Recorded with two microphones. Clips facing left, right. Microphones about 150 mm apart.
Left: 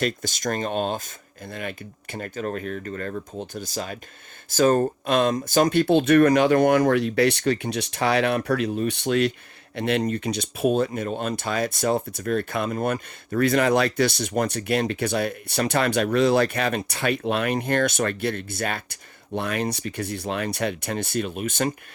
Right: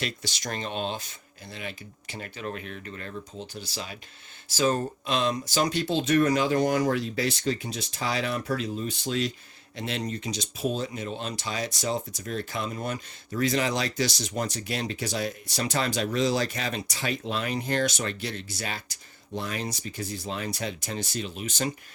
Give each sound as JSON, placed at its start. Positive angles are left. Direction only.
{"t": 0.0, "sound": "speech", "side_deg": 50}